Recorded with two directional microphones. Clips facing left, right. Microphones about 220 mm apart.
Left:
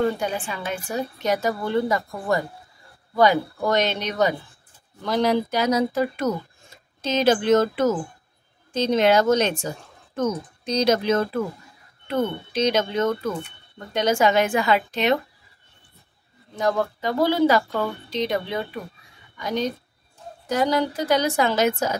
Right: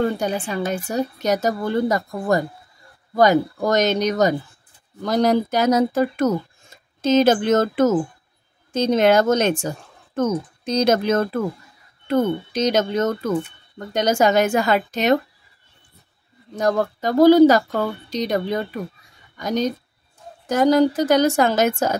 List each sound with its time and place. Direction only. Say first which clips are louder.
0.2 s a woman's voice: right 5 dB; 40° right (ahead or behind)
16.5 s a woman's voice: right 3 dB; 45° right (ahead or behind)